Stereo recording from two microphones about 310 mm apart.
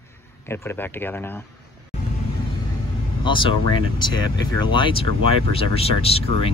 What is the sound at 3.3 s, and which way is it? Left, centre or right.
Speech, centre.